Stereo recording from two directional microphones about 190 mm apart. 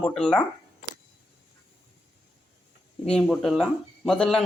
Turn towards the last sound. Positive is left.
turn(degrees=5)  # may be behind; listen again after turning